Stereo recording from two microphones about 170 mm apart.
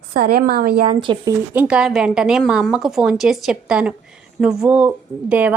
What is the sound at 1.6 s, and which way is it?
A woman's voice, 5° right (ahead or behind).